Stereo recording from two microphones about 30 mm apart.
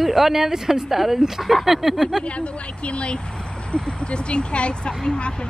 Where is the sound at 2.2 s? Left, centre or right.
Left.